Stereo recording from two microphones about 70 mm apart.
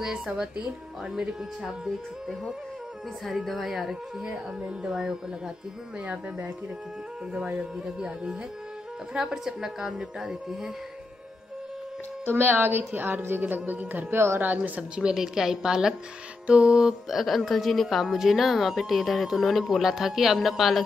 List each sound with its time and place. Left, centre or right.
0.0 s a woman's voice: centre
7.3 s a woman's voice: centre
12.3 s a woman's voice: right
15.0 s a woman's voice: centre